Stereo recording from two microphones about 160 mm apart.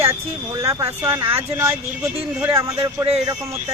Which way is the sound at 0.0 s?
20° right (ahead or behind).